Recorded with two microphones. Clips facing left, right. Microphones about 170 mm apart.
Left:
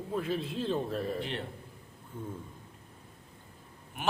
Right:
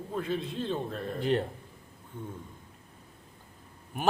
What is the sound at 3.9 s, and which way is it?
Speech, 40° right (ahead or behind).